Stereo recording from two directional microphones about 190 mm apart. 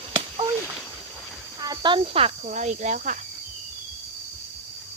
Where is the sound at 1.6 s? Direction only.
20° right (ahead or behind); by 3.2 s 45° right (ahead or behind).